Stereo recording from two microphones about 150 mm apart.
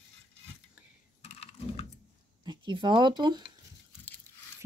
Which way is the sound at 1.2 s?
45° left (ahead or behind).